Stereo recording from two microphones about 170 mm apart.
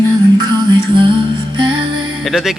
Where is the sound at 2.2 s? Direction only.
Centre (ahead or behind).